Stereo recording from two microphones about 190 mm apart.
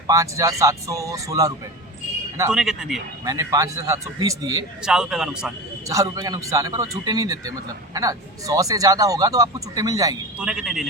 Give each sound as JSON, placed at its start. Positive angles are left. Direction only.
{"t": 0.1, "sound": "a man's voice", "side_deg": -15}
{"t": 2.5, "sound": "speech", "side_deg": -5}
{"t": 3.2, "sound": "a man's voice", "side_deg": -20}
{"t": 4.8, "sound": "speech", "side_deg": -5}
{"t": 5.9, "sound": "a man's voice", "side_deg": -20}
{"t": 10.4, "sound": "speech", "side_deg": -5}